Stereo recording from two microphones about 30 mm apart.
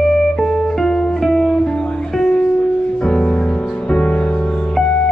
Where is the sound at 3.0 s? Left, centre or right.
Left.